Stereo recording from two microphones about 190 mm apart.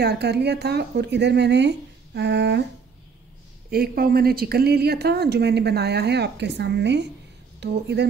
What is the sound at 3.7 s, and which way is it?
A woman's voice, 50° right (ahead or behind).